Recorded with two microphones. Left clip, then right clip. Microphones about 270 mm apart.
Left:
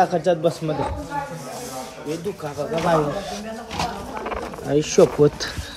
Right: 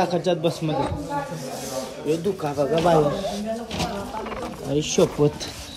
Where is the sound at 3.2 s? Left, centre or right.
Centre.